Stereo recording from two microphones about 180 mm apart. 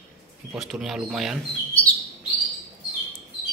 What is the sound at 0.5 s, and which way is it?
Speech, centre (ahead or behind).